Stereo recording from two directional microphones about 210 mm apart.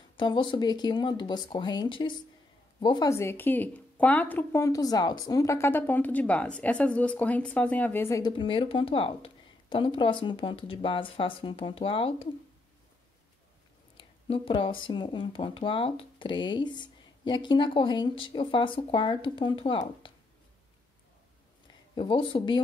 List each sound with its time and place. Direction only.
0.2 s a woman's voice: 20° left (ahead or behind)
13.9 s speech: 25° left (ahead or behind)
21.9 s speech: 25° left (ahead or behind)